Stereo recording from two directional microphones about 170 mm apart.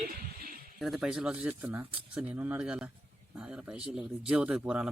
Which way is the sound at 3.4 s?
5° right (ahead or behind).